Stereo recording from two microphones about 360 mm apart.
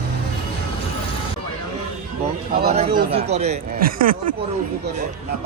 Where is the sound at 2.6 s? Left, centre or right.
Right.